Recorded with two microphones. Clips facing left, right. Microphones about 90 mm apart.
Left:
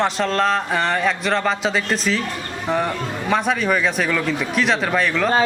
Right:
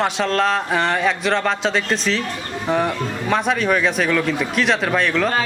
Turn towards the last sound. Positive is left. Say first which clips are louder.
# right 1 dB
turn(degrees=0)  # may be behind; listen again after turning